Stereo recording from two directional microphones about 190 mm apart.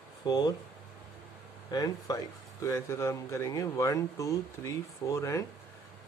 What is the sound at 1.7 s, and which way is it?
Speech, 20° left (ahead or behind).